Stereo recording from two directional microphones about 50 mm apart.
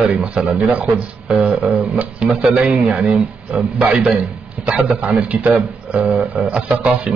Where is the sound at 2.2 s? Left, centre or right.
Right.